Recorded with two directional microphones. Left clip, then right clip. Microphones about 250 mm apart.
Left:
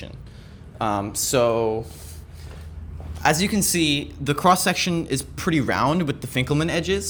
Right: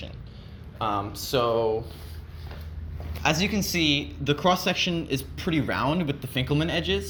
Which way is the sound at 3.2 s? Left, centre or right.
Left.